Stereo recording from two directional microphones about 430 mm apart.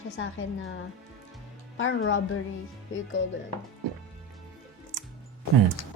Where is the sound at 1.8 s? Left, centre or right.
Left.